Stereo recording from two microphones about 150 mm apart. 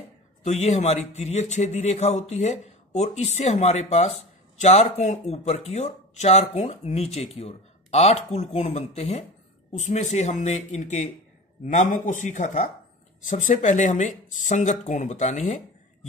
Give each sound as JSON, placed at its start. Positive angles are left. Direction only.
{"t": 0.4, "sound": "a man's voice", "side_deg": 45}